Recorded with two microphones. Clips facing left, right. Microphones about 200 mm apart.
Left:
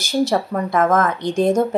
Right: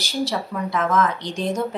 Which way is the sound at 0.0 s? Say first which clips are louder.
Left 6 dB; 50° left (ahead or behind).